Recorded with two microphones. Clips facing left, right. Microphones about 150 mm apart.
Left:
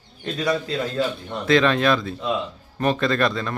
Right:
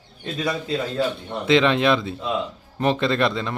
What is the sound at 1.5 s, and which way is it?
A man's voice, 20° right (ahead or behind).